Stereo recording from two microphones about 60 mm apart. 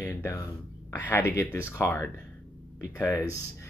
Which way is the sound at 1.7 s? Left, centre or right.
Left.